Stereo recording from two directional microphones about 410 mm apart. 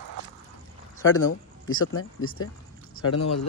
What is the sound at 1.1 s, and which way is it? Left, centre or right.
Speech, left.